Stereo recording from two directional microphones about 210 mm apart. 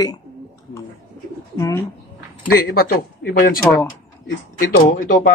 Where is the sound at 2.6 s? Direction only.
45° left (ahead or behind).